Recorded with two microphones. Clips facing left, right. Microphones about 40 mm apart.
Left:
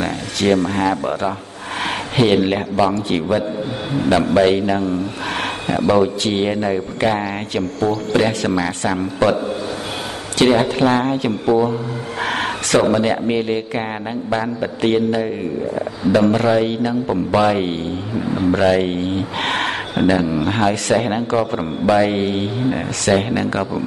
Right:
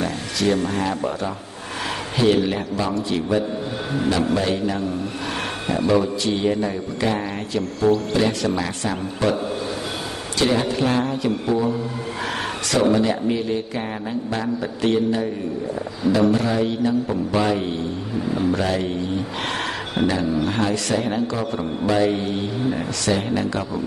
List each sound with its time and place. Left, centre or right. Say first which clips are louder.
0.0 s a sound: left 3 dB; left
0.6 s a man's voice: left 5 dB; left
4.1 s a man's voice: left 8 dB; left
10.4 s a man's voice: left 6 dB; left
20.0 s a man's voice: left 4 dB; left